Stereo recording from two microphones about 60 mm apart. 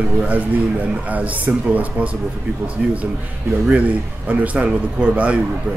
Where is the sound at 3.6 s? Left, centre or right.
Right.